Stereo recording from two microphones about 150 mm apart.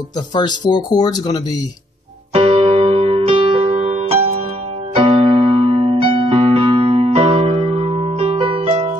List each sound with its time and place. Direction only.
0.3 s speech: 30° left (ahead or behind)
2.3 s music: 40° right (ahead or behind)
4.9 s electric piano: 40° right (ahead or behind)